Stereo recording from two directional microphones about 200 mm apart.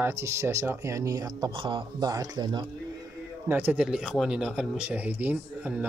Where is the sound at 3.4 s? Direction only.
10° right (ahead or behind).